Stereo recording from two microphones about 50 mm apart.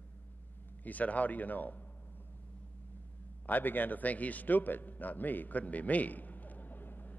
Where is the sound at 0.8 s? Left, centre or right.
Left.